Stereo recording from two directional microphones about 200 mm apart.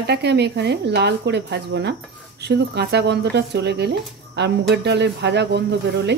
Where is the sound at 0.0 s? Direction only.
55° right (ahead or behind).